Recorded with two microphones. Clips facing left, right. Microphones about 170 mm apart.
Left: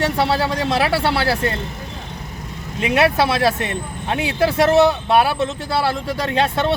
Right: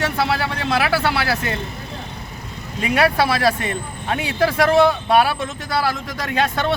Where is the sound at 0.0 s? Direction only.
30° left (ahead or behind).